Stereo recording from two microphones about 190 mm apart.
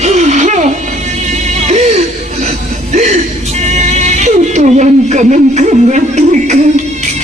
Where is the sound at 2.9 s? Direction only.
35° right (ahead or behind).